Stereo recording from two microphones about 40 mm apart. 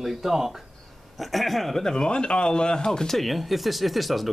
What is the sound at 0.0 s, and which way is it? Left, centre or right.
Speech, centre.